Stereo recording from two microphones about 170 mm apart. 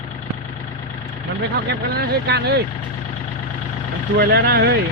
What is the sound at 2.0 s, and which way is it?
Speech, 70° right (ahead or behind).